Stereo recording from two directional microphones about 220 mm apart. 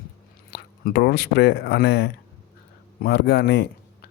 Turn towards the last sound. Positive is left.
turn(degrees=45)  # may be behind; listen again after turning